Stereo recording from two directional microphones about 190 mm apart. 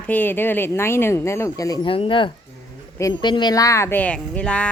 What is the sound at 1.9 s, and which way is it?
A child's voice, 25° left (ahead or behind).